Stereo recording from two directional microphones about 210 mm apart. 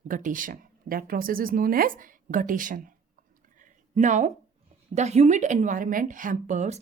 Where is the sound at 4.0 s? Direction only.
35° right (ahead or behind).